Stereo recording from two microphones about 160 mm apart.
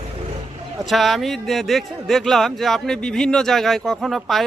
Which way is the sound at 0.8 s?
Centre (ahead or behind).